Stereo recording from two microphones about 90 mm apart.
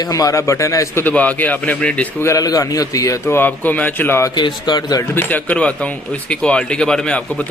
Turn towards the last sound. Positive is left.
turn(degrees=10)  # may be behind; listen again after turning